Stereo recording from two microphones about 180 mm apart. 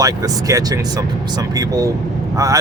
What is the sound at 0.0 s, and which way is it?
Speech, 20° right (ahead or behind).